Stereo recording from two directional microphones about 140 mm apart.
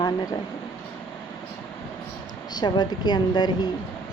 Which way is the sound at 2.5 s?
30° left (ahead or behind).